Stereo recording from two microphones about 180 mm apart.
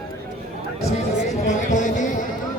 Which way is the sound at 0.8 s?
40° left (ahead or behind).